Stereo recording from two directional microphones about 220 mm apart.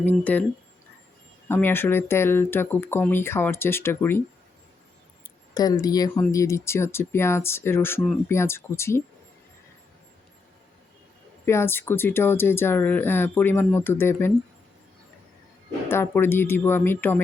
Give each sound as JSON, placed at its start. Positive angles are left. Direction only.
{"t": 0.0, "sound": "speech", "side_deg": 10}
{"t": 1.5, "sound": "speech", "side_deg": 10}
{"t": 5.2, "sound": "a sound", "side_deg": 15}
{"t": 6.3, "sound": "speech", "side_deg": 15}
{"t": 11.4, "sound": "speech", "side_deg": 10}
{"t": 15.9, "sound": "speech", "side_deg": 10}